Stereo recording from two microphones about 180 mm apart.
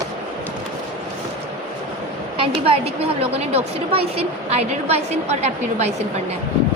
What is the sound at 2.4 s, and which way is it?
A woman's voice, 30° right (ahead or behind).